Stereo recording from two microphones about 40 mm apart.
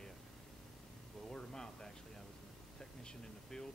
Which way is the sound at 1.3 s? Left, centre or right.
Centre.